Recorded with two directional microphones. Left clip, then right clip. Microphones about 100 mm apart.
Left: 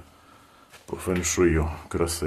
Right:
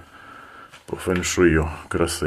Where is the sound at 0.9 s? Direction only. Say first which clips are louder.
Right 4 dB; 15° right (ahead or behind).